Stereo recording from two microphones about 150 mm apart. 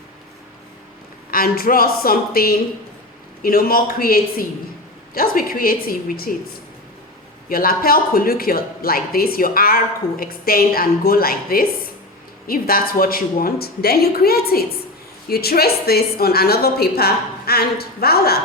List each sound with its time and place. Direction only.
1.3 s a woman's voice: 80° left
7.5 s a woman's voice: 80° left